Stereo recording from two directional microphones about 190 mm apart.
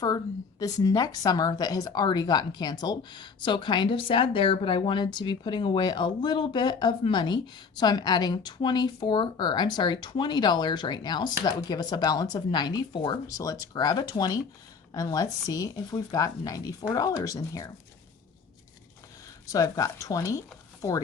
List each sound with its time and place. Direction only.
0.6 s speech: 20° left (ahead or behind)
19.5 s speech: 20° left (ahead or behind)